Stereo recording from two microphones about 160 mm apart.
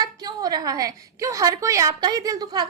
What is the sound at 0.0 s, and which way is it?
A woman's voice, 25° right (ahead or behind).